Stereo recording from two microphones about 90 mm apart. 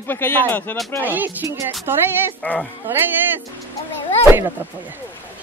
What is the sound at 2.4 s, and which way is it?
Speech, 15° left (ahead or behind).